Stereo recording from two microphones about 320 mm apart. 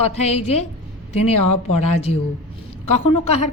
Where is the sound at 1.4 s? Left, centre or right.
Left.